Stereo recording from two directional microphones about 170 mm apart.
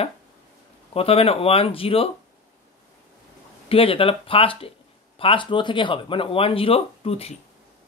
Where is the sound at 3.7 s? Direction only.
35° left (ahead or behind).